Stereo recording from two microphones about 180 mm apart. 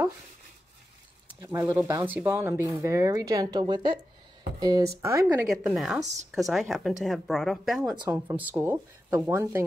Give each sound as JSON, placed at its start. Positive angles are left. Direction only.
{"t": 1.4, "sound": "speech", "side_deg": -15}
{"t": 5.2, "sound": "speech", "side_deg": 0}
{"t": 8.1, "sound": "speech", "side_deg": -10}